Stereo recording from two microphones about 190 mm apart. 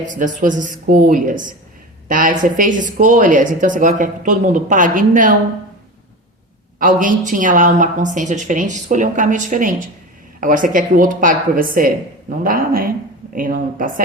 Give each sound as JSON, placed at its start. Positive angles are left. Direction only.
{"t": 0.0, "sound": "speech", "side_deg": -40}
{"t": 6.7, "sound": "speech", "side_deg": -45}